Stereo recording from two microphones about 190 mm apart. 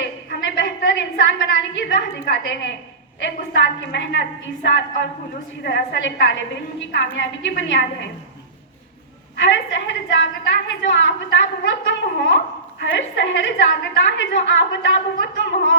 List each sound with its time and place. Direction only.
0.3 s a sound: 60° left (ahead or behind)
3.2 s a woman's voice: 65° left (ahead or behind)
9.3 s a woman's voice: 70° left (ahead or behind)